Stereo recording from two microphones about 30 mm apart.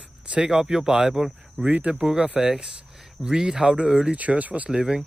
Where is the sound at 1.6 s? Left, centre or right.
Right.